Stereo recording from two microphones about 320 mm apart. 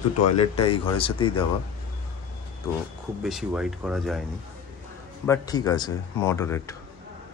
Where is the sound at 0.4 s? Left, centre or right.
Centre.